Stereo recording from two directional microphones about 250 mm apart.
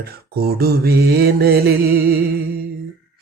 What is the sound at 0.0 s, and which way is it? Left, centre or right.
Mantra, right.